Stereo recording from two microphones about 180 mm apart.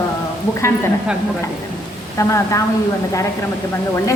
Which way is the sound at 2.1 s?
15° left (ahead or behind).